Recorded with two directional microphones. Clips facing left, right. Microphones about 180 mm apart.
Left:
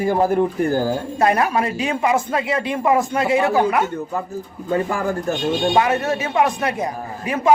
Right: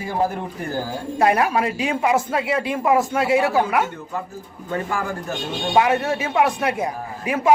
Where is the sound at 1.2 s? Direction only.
10° right (ahead or behind).